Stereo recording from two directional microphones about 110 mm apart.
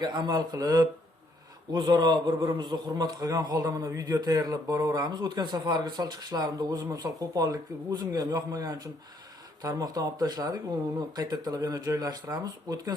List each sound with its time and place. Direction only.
0.0 s a man's voice: 40° right (ahead or behind)